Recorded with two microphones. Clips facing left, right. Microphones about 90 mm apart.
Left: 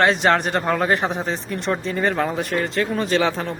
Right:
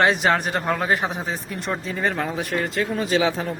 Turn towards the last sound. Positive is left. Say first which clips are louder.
# left 1 dB
turn(degrees=-5)  # may be behind; listen again after turning